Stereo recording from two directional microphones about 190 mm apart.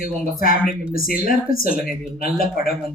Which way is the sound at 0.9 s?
50° left (ahead or behind).